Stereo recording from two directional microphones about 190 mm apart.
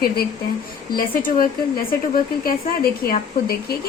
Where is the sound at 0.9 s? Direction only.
45° left (ahead or behind).